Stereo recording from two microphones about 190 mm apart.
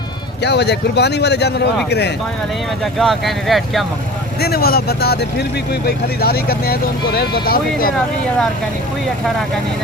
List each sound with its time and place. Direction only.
0.4 s speech: 60° left (ahead or behind)
2.8 s speech: centre (ahead or behind)
4.4 s speech: 55° left (ahead or behind)